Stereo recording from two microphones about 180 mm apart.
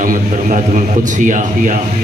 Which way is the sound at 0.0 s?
45° right (ahead or behind).